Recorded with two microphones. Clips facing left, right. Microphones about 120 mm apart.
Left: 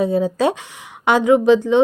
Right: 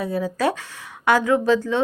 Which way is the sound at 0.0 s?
25° left (ahead or behind).